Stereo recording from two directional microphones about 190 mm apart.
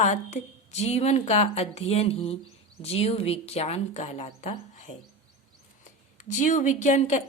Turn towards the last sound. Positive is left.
turn(degrees=40)  # may be behind; listen again after turning